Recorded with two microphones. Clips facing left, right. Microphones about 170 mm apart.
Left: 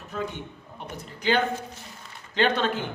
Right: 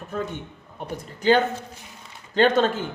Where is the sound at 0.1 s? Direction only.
45° right (ahead or behind).